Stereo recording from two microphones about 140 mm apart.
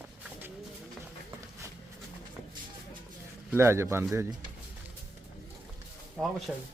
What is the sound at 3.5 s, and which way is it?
Speech, 20° right (ahead or behind).